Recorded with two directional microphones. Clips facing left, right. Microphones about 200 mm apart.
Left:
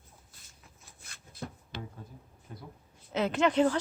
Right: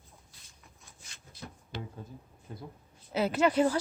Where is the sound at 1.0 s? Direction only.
55° left (ahead or behind).